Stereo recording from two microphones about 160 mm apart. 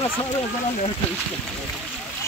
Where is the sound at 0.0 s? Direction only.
25° left (ahead or behind).